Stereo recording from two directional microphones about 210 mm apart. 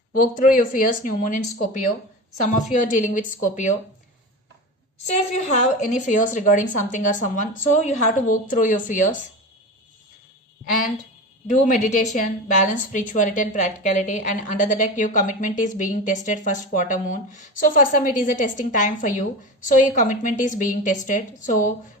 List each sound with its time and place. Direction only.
0.1 s a woman's voice: 40° left (ahead or behind)
2.7 s a woman's voice: 35° left (ahead or behind)
5.0 s a woman's voice: 35° left (ahead or behind)
11.6 s a woman's voice: 35° left (ahead or behind)